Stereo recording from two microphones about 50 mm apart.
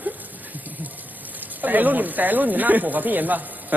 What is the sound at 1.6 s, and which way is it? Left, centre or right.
Speech, right.